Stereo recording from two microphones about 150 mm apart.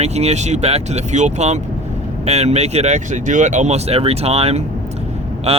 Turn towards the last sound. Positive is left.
turn(degrees=-40)  # may be behind; listen again after turning